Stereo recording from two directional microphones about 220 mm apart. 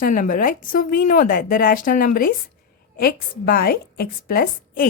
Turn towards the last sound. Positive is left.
turn(degrees=45)  # may be behind; listen again after turning